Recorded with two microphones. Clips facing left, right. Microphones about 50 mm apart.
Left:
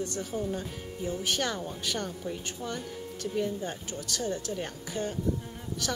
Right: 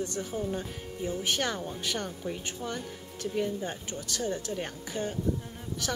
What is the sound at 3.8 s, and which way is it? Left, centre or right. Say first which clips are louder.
A woman's voice: left 1 dB; right.